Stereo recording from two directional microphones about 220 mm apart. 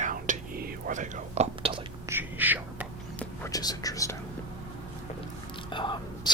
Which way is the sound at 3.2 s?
15° left (ahead or behind).